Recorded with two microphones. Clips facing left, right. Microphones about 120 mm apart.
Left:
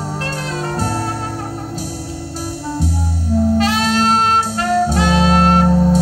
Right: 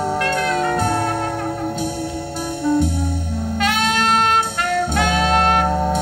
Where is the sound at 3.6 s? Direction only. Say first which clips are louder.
Left 3 dB; 35° left (ahead or behind).